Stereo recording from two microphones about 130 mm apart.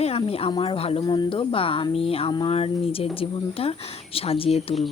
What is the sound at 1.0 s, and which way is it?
Speech, 35° left (ahead or behind).